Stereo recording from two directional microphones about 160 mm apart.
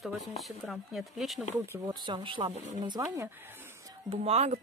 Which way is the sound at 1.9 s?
30° right (ahead or behind).